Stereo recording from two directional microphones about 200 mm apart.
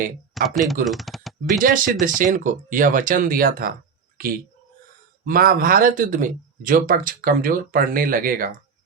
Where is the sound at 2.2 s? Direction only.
40° right (ahead or behind).